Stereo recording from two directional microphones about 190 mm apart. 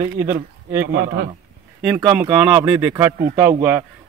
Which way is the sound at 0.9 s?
60° right (ahead or behind).